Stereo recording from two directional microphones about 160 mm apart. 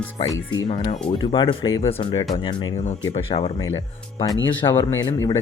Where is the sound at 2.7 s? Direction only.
45° left (ahead or behind); by 5.4 s 20° left (ahead or behind).